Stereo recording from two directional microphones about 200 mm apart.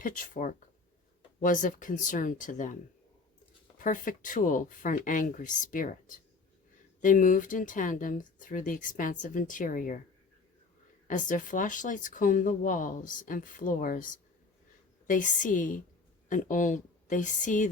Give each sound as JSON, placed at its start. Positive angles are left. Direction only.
{"t": 0.0, "sound": "speech", "side_deg": 40}
{"t": 3.8, "sound": "speech", "side_deg": 40}
{"t": 11.1, "sound": "speech", "side_deg": 40}